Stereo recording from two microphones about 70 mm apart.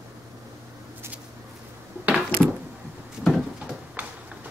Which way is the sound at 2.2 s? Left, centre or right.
Left.